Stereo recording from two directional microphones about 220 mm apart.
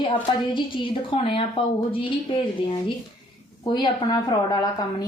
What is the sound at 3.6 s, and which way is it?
Speech, 20° left (ahead or behind).